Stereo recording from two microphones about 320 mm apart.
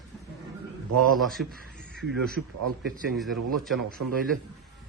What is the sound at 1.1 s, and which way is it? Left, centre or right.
Speech, centre.